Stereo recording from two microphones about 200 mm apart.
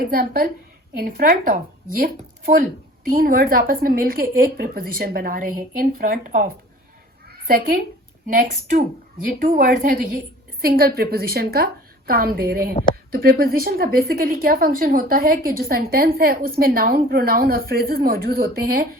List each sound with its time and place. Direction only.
0.0 s a woman's voice: 45° right (ahead or behind)